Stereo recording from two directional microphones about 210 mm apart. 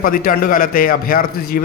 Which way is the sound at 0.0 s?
40° left (ahead or behind).